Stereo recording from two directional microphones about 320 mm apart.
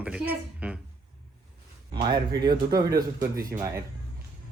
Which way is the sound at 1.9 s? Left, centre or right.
Centre.